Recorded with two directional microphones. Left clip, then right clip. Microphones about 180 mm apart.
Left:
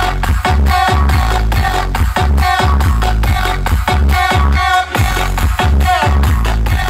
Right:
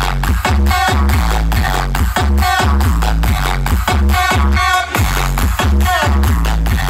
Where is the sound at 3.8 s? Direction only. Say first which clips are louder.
Left 1 dB; 50° right (ahead or behind).